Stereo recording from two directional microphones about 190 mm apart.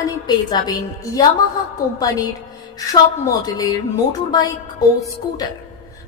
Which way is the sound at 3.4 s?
20° left (ahead or behind).